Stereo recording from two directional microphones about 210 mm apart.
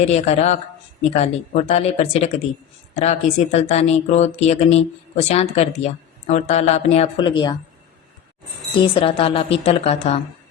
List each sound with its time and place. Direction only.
0.0 s speech: 30° left (ahead or behind)
8.8 s a woman's voice: 25° left (ahead or behind)